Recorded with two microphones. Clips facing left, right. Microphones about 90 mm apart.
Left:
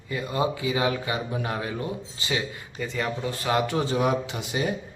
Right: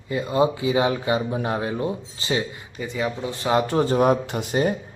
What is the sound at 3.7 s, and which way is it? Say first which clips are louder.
Speech: right 5 dB; 40° right (ahead or behind).